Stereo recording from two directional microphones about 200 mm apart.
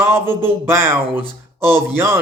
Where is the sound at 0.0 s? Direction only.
10° right (ahead or behind).